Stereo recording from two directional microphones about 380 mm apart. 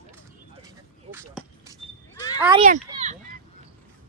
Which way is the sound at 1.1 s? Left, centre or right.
Centre.